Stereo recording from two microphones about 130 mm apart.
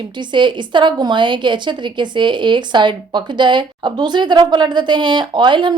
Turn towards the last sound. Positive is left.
turn(degrees=-35)  # may be behind; listen again after turning